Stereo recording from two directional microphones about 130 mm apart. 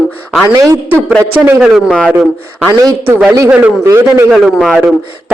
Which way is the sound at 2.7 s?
30° right (ahead or behind).